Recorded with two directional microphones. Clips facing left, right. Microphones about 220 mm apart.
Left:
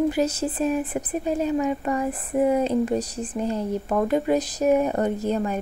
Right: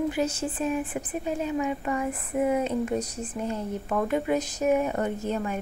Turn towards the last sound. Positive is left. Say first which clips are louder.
# left 5 dB
turn(degrees=35)  # may be behind; listen again after turning